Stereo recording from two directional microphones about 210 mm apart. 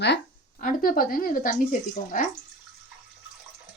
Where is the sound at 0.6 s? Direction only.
40° left (ahead or behind).